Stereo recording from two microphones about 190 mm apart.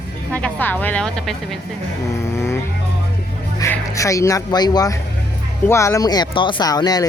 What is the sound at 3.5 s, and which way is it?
Speech, 15° left (ahead or behind).